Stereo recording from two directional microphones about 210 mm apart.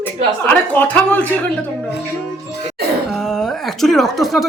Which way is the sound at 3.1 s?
Centre (ahead or behind).